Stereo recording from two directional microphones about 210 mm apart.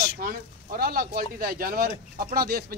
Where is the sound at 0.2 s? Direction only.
45° right (ahead or behind).